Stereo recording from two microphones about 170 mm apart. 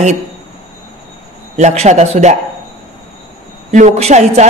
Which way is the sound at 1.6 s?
40° right (ahead or behind).